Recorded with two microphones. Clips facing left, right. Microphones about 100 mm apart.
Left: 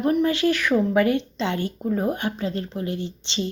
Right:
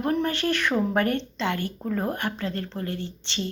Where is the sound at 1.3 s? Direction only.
20° left (ahead or behind).